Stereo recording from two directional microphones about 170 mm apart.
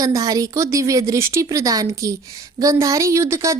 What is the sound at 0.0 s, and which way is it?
A woman's voice, 20° right (ahead or behind).